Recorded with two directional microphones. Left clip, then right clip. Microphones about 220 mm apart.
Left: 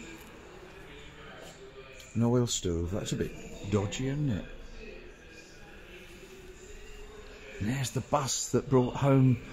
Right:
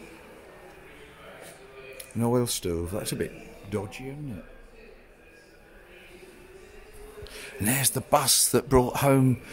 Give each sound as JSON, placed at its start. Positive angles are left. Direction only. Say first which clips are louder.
{"t": 2.1, "sound": "speech", "louder": "right 3 dB", "side_deg": -20}
{"t": 3.7, "sound": "speech", "louder": "left 2 dB", "side_deg": 10}
{"t": 7.6, "sound": "speech", "louder": "right 8 dB", "side_deg": -25}